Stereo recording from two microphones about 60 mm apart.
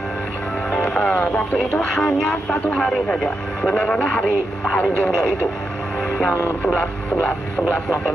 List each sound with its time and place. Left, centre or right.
0.7 s music: centre
0.9 s music: left
1.8 s speech: centre
6.6 s speech: left